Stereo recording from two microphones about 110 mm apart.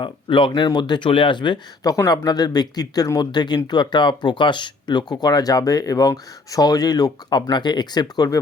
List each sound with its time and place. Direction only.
0.0 s speech: 50° left (ahead or behind)